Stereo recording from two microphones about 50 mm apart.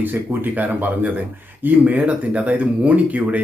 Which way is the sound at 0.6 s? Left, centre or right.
Right.